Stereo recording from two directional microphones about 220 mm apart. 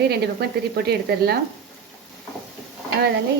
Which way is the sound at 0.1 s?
45° right (ahead or behind).